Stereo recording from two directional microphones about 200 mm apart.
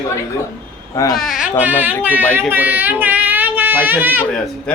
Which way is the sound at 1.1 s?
Centre (ahead or behind).